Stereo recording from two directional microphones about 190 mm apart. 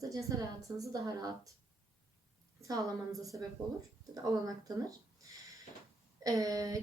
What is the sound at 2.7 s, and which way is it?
Speech, 15° right (ahead or behind).